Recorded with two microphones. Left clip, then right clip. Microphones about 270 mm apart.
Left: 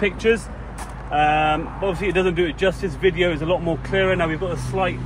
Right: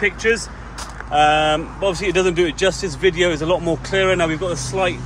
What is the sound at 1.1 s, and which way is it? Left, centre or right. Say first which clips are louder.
Speech: right 3 dB; centre.